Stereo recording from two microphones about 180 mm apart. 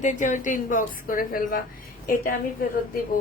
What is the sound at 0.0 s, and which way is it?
A woman's voice, 45° left (ahead or behind).